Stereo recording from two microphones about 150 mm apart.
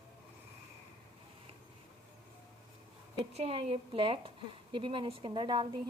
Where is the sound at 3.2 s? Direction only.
40° right (ahead or behind).